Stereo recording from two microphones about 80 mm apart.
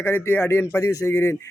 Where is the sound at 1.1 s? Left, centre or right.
Left.